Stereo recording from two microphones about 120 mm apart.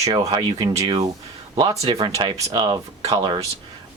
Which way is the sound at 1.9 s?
30° right (ahead or behind).